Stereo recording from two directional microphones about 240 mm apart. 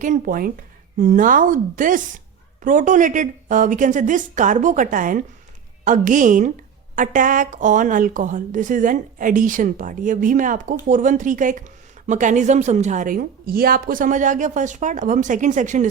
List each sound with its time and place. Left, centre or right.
0.0 s a woman's voice: right